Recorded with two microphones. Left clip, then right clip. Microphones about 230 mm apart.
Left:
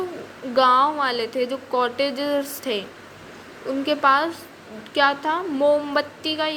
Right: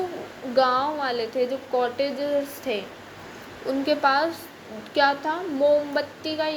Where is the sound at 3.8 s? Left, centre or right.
Centre.